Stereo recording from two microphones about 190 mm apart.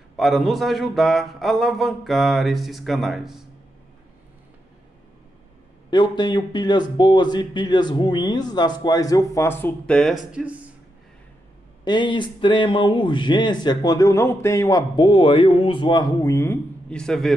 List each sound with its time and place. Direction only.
0.1 s speech: centre (ahead or behind)
5.9 s speech: 25° left (ahead or behind); by 10.7 s 5° right (ahead or behind)
11.8 s speech: 25° left (ahead or behind); by 17.3 s 5° left (ahead or behind)